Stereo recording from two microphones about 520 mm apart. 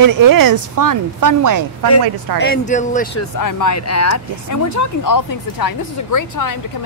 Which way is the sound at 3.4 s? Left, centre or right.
Left.